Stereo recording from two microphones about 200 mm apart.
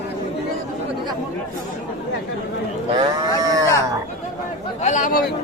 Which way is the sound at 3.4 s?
15° right (ahead or behind).